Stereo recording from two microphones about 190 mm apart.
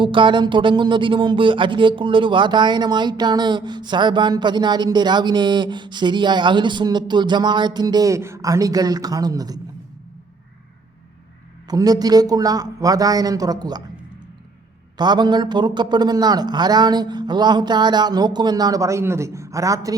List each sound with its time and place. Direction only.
0.0 s speech: 25° right (ahead or behind)
11.7 s speech: 20° right (ahead or behind)
14.9 s speech: 20° right (ahead or behind)